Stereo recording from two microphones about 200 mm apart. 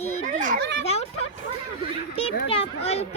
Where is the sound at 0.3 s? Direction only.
40° right (ahead or behind).